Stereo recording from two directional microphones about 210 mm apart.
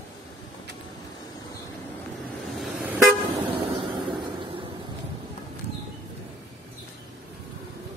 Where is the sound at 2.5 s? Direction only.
Centre (ahead or behind).